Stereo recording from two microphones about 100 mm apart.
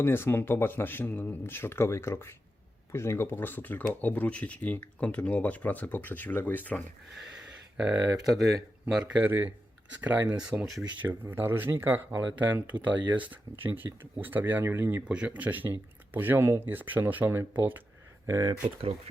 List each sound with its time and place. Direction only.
0.0 s speech: 20° left (ahead or behind)
7.8 s speech: 15° right (ahead or behind)
8.4 s speech: centre (ahead or behind)
11.1 s speech: 20° right (ahead or behind)
15.0 s speech: 10° right (ahead or behind)
18.3 s speech: 30° right (ahead or behind)